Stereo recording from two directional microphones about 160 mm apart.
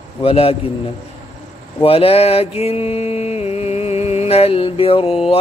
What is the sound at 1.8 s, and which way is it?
Mantra, 35° left (ahead or behind).